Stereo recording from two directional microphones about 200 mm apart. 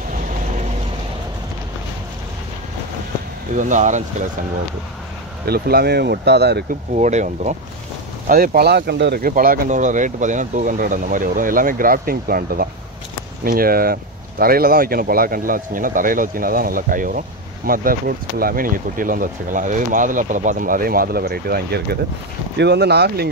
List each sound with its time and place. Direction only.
3.5 s speech: 40° right (ahead or behind)
5.5 s speech: 50° right (ahead or behind)
7.0 s speech: 35° right (ahead or behind)
8.3 s speech: 50° right (ahead or behind)